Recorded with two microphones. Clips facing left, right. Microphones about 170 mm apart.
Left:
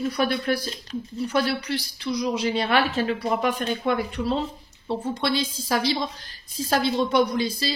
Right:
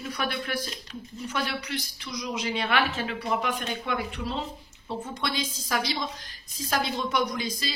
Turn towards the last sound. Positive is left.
turn(degrees=30)  # may be behind; listen again after turning